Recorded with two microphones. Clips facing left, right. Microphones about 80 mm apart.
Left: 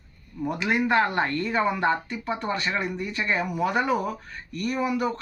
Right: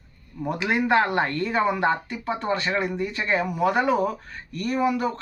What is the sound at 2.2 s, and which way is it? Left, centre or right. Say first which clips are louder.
Speech: right 2 dB; right.